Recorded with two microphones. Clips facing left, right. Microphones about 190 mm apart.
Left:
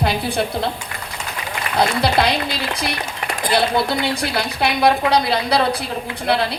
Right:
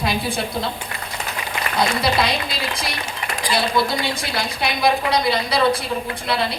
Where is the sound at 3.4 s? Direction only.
60° left (ahead or behind).